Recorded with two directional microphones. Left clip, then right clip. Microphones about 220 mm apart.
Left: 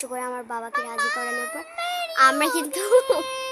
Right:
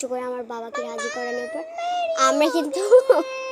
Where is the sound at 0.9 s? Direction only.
20° left (ahead or behind).